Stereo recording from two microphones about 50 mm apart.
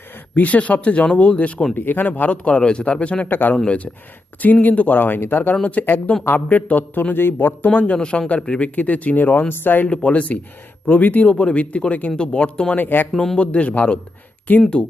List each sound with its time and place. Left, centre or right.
0.3 s speech: left
1.7 s speech: left
3.2 s speech: left
4.6 s speech: left
7.7 s speech: left
7.9 s speech: centre; by 9.8 s left
9.8 s speech: left
12.1 s speech: left
12.7 s speech: left
13.1 s speech: centre
14.5 s speech: left